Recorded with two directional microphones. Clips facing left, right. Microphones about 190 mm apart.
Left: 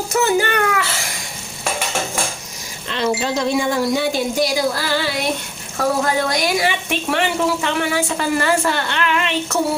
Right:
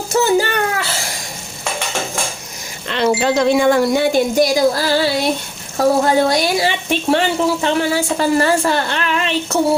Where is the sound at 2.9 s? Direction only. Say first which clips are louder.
Right 4 dB; 65° right (ahead or behind).